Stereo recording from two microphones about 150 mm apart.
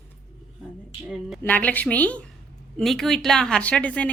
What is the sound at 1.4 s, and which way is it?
A woman's voice, 10° left (ahead or behind).